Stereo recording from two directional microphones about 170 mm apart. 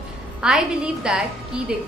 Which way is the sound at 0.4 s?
5° right (ahead or behind).